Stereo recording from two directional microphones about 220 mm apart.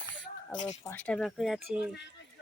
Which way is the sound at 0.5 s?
20° left (ahead or behind).